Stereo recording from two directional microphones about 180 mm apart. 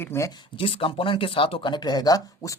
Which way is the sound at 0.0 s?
15° left (ahead or behind).